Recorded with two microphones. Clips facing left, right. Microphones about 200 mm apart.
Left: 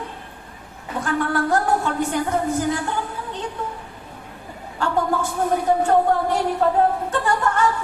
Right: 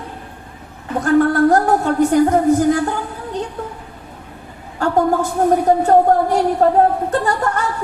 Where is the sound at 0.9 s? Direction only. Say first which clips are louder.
Right 9 dB; 40° right (ahead or behind).